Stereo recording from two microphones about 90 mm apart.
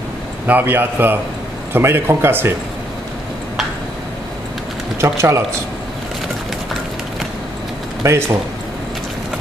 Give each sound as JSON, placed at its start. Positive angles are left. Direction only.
{"t": 0.5, "sound": "speech", "side_deg": -20}
{"t": 5.0, "sound": "a man's voice", "side_deg": -30}
{"t": 8.0, "sound": "a man's voice", "side_deg": -30}